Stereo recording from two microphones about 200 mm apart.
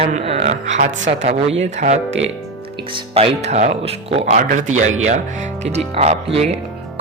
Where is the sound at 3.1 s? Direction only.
30° right (ahead or behind).